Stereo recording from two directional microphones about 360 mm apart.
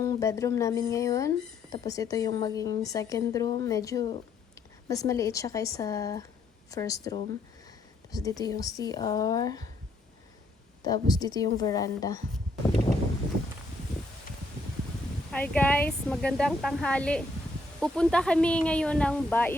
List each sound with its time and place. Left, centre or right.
0.0 s a woman's voice: centre
10.8 s a woman's voice: centre
15.3 s speech: centre